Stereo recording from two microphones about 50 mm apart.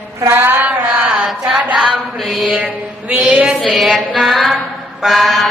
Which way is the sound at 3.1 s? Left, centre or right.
Right.